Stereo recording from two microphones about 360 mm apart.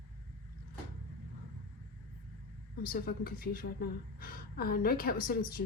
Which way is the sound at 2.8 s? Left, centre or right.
Left.